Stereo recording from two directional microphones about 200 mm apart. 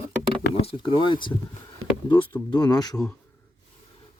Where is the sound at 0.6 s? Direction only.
25° left (ahead or behind).